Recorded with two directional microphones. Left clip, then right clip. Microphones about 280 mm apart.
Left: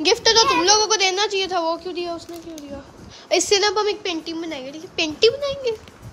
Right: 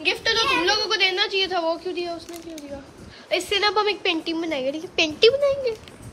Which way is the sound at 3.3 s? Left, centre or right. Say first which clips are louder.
Left 3 dB; centre.